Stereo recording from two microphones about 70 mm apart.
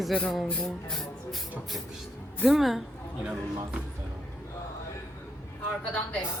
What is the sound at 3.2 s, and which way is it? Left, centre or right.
Speech, centre.